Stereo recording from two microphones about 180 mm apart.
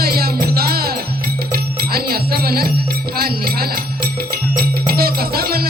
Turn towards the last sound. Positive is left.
turn(degrees=-60)  # may be behind; listen again after turning